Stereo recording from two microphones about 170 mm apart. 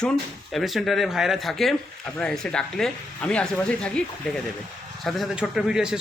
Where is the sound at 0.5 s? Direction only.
Centre (ahead or behind).